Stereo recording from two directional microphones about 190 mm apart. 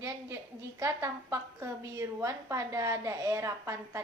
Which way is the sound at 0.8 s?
15° right (ahead or behind).